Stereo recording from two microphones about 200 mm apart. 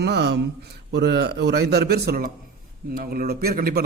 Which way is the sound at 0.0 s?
55° right (ahead or behind).